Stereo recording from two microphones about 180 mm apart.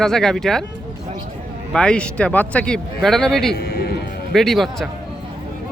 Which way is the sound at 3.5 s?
55° left (ahead or behind).